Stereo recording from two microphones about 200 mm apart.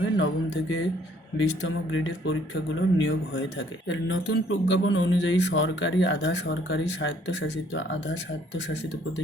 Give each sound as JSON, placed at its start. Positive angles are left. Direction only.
{"t": 0.2, "sound": "speech", "side_deg": 65}